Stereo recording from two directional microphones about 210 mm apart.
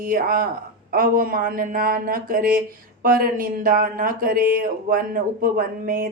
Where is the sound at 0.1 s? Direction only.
40° right (ahead or behind).